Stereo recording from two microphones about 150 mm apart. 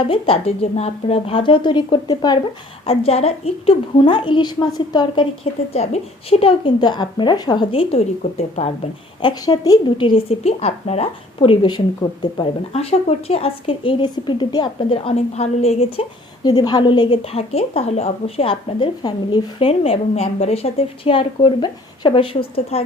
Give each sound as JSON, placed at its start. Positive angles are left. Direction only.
{"t": 0.1, "sound": "a woman's voice", "side_deg": 40}
{"t": 2.8, "sound": "a woman's voice", "side_deg": 40}
{"t": 5.7, "sound": "a woman's voice", "side_deg": 45}
{"t": 9.2, "sound": "a woman's voice", "side_deg": 25}
{"t": 16.4, "sound": "a woman's voice", "side_deg": 25}